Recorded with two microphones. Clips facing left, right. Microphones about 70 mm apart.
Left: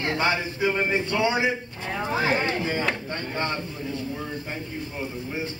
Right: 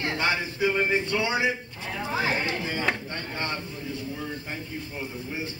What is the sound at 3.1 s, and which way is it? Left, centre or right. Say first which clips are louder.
Speech: left 3 dB; left.